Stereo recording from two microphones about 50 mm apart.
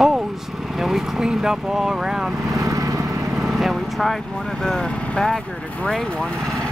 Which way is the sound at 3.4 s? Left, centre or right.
Centre.